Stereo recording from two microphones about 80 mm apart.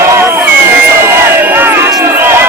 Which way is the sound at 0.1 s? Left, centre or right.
Right.